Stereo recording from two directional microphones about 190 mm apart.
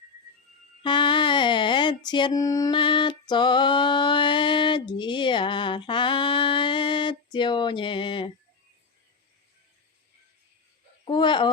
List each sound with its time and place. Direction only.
0.8 s female singing: 25° left (ahead or behind)
11.0 s speech: 25° left (ahead or behind)